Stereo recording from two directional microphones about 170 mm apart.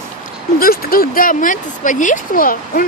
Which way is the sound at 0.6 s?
60° left (ahead or behind).